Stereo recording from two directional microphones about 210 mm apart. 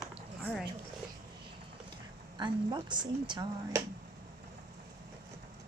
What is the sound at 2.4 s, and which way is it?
Speech, 20° right (ahead or behind).